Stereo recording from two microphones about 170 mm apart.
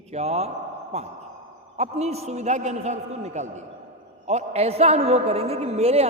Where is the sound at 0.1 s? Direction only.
40° right (ahead or behind).